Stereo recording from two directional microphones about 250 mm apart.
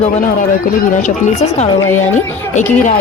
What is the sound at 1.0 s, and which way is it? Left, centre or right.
Speech, left.